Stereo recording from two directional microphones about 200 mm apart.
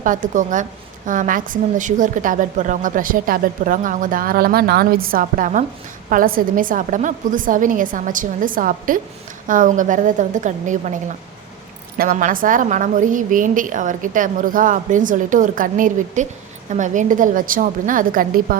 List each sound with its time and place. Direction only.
0.0 s a woman's voice: 40° right (ahead or behind)
11.9 s a woman's voice: 40° right (ahead or behind)